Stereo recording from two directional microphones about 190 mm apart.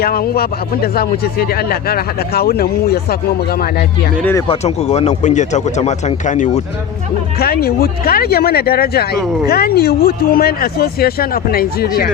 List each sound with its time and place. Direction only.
0.0 s speech: 55° left (ahead or behind)
4.2 s speech: 10° left (ahead or behind)
4.4 s speech: 35° left (ahead or behind)
7.3 s speech: 55° left (ahead or behind)